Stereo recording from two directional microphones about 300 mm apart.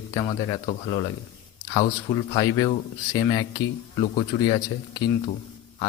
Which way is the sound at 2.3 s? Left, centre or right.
Centre.